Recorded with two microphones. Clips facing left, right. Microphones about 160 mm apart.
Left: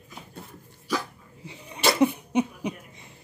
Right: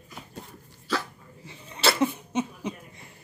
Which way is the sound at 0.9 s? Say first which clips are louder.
Left 1 dB; 15° left (ahead or behind).